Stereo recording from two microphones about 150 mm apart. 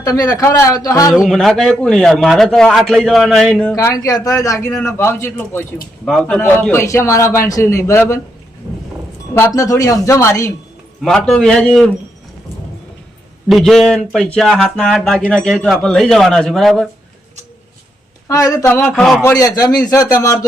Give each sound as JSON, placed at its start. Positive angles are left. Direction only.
{"t": 0.0, "sound": "a man's voice", "side_deg": 25}
{"t": 1.1, "sound": "a man's voice", "side_deg": 0}
{"t": 3.8, "sound": "a man's voice", "side_deg": 20}
{"t": 9.3, "sound": "a man's voice", "side_deg": 20}
{"t": 11.0, "sound": "a man's voice", "side_deg": 5}
{"t": 13.5, "sound": "a man's voice", "side_deg": 0}
{"t": 18.3, "sound": "a man's voice", "side_deg": 20}
{"t": 19.2, "sound": "a man's voice", "side_deg": 25}